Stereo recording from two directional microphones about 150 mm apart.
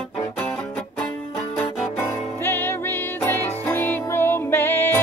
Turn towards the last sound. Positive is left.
turn(degrees=15)  # may be behind; listen again after turning